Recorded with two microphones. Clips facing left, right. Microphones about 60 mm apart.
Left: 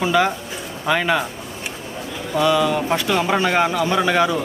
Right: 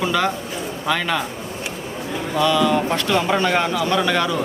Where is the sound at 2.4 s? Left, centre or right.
Centre.